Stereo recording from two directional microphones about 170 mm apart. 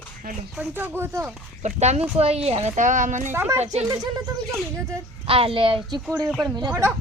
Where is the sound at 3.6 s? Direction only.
40° right (ahead or behind).